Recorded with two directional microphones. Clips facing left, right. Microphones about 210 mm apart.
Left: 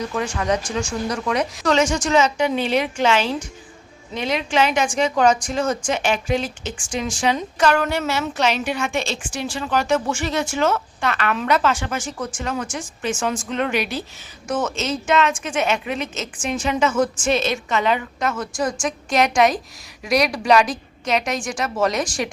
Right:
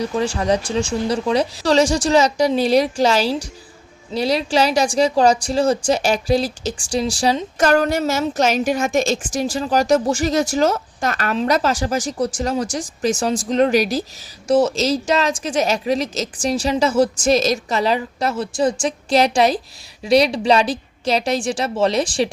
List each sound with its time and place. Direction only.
0.0 s a woman's voice: 30° right (ahead or behind)